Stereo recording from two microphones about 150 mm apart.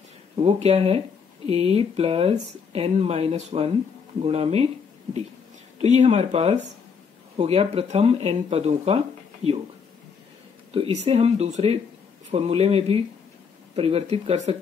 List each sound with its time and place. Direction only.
0.4 s speech: 40° right (ahead or behind)
5.8 s speech: 50° right (ahead or behind)
10.7 s speech: 40° right (ahead or behind)